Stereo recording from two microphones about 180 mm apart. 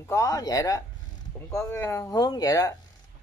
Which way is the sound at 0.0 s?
15° left (ahead or behind).